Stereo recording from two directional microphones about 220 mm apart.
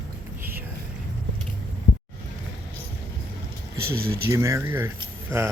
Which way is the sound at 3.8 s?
45° right (ahead or behind).